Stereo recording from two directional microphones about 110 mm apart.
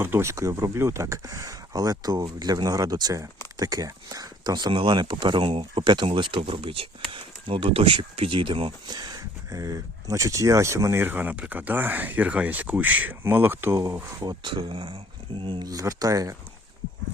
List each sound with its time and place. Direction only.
0.0 s speech: 25° right (ahead or behind); by 4.7 s 40° right (ahead or behind)
4.7 s speech: 50° right (ahead or behind)
8.9 s speech: 40° right (ahead or behind)
14.2 s speech: 40° right (ahead or behind)
15.6 s speech: 30° right (ahead or behind)